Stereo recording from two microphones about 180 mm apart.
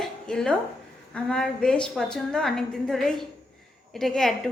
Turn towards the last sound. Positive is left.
turn(degrees=5)  # may be behind; listen again after turning